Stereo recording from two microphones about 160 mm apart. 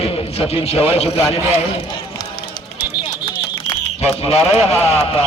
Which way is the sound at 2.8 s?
10° right (ahead or behind).